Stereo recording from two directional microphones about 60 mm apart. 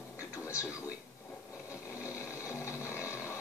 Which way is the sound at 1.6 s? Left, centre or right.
Left.